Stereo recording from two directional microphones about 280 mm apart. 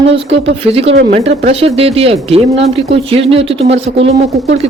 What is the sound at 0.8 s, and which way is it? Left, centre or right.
Speech, right.